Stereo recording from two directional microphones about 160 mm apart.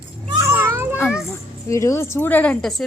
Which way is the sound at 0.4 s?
15° right (ahead or behind).